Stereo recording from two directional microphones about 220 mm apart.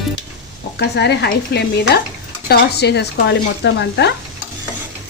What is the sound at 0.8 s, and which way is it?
Speech, 50° left (ahead or behind).